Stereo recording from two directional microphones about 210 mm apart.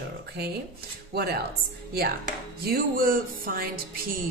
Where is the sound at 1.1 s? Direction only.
50° right (ahead or behind).